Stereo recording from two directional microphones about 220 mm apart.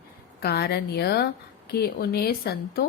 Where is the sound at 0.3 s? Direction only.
45° left (ahead or behind).